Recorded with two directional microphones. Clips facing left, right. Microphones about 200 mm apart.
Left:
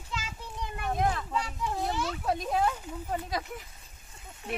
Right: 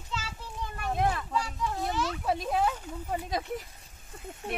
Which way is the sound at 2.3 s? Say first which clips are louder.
Even; centre (ahead or behind).